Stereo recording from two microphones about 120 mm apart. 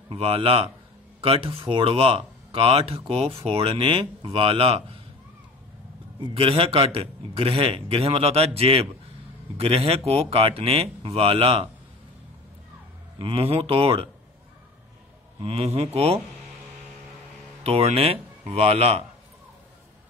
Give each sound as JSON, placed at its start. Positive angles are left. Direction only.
{"t": 0.1, "sound": "speech", "side_deg": -50}
{"t": 6.3, "sound": "speech", "side_deg": -50}
{"t": 13.2, "sound": "speech", "side_deg": -50}
{"t": 15.4, "sound": "speech", "side_deg": -55}
{"t": 17.6, "sound": "speech", "side_deg": -55}